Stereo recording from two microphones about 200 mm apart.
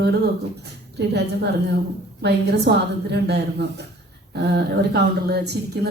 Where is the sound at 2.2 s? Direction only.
55° right (ahead or behind).